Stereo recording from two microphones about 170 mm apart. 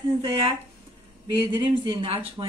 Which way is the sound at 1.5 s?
25° right (ahead or behind).